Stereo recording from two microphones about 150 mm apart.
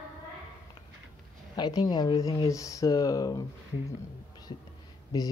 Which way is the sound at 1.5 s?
30° left (ahead or behind).